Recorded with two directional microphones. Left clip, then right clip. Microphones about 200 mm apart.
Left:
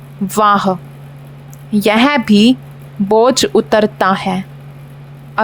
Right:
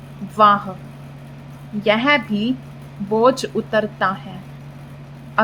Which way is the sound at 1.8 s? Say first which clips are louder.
Left 4 dB; 60° left (ahead or behind).